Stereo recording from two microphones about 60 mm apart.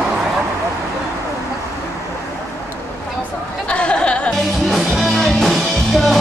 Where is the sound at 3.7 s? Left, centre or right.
Centre.